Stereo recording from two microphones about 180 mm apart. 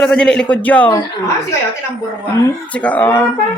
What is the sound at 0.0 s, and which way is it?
Speech, 5° left (ahead or behind).